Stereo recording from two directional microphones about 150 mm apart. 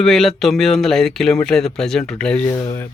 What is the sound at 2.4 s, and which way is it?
Speech, 20° left (ahead or behind).